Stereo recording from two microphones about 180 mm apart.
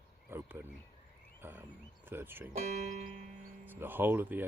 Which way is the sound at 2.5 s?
40° right (ahead or behind).